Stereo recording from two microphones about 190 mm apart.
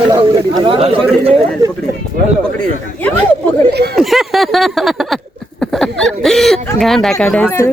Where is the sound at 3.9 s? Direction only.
Centre (ahead or behind).